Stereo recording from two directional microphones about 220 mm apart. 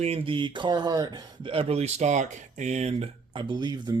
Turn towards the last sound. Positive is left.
turn(degrees=-20)  # may be behind; listen again after turning